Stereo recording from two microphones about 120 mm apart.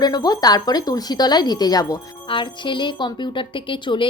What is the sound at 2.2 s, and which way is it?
Speech, 40° left (ahead or behind).